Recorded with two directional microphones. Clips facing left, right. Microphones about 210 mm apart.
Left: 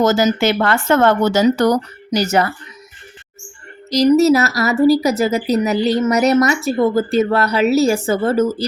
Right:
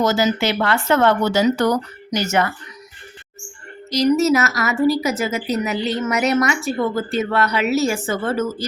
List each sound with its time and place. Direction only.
0.0 s speech: 45° left (ahead or behind)
3.9 s speech: 35° left (ahead or behind)